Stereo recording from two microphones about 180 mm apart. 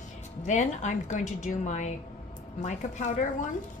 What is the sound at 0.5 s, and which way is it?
A woman's voice, 40° left (ahead or behind).